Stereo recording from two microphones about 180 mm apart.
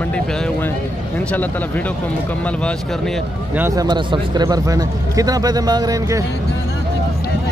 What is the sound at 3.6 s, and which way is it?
Speech, 15° right (ahead or behind).